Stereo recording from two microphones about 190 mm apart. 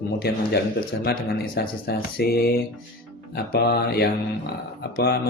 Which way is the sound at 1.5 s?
55° left (ahead or behind).